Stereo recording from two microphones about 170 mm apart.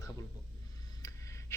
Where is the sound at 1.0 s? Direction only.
20° left (ahead or behind).